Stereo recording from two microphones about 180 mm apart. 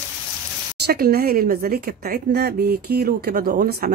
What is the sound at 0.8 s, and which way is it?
Speech, 60° right (ahead or behind).